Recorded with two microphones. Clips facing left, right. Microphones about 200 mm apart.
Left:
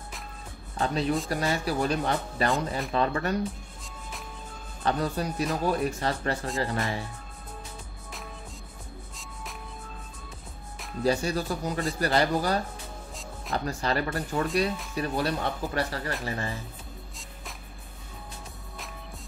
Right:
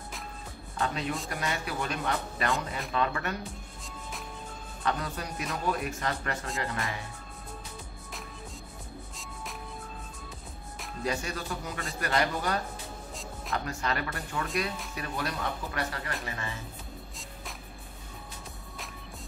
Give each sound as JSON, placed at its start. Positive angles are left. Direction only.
{"t": 0.7, "sound": "speech", "side_deg": 35}
{"t": 4.8, "sound": "speech", "side_deg": 35}
{"t": 11.1, "sound": "speech", "side_deg": 35}
{"t": 13.1, "sound": "music", "side_deg": 0}
{"t": 13.7, "sound": "speech", "side_deg": 35}